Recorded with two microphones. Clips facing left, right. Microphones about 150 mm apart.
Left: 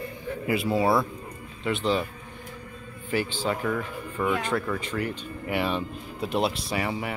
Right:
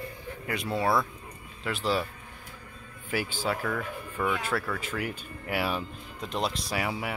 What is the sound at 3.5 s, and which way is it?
Speech, 5° left (ahead or behind).